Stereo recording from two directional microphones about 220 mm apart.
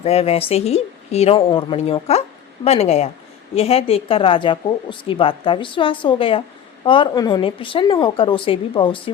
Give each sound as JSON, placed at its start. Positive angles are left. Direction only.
{"t": 0.0, "sound": "speech", "side_deg": 25}